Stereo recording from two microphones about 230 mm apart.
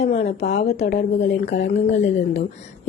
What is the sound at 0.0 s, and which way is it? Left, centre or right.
Speech, left.